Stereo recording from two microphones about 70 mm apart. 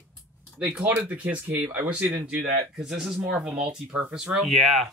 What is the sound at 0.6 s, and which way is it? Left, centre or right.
Speech, centre.